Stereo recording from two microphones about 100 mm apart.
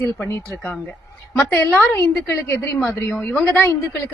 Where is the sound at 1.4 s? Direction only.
25° left (ahead or behind).